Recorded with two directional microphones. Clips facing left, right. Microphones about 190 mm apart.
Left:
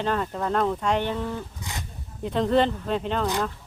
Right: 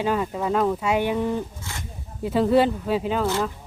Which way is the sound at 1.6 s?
15° left (ahead or behind).